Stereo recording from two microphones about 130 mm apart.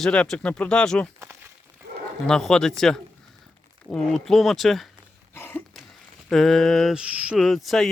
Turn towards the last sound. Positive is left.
turn(degrees=0)  # may be behind; listen again after turning